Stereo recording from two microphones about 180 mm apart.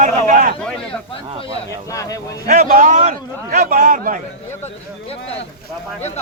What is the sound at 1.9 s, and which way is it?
Speech, 20° left (ahead or behind).